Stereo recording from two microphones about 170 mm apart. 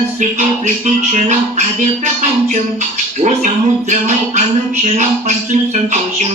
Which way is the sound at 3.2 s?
45° right (ahead or behind).